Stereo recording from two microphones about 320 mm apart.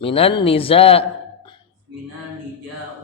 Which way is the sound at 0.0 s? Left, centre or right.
Centre.